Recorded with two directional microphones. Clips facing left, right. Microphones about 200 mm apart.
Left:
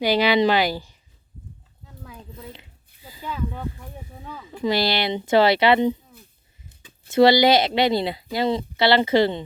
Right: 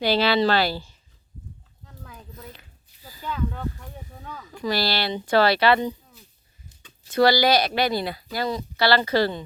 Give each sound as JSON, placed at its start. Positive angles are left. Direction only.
{"t": 0.0, "sound": "speech", "side_deg": 15}
{"t": 2.3, "sound": "speech", "side_deg": 25}
{"t": 3.0, "sound": "a sound", "side_deg": 25}
{"t": 3.2, "sound": "speech", "side_deg": 10}
{"t": 4.6, "sound": "speech", "side_deg": 20}
{"t": 7.1, "sound": "speech", "side_deg": 25}